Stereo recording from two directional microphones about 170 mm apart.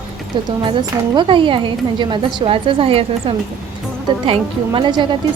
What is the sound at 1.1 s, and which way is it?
Speech, 30° right (ahead or behind).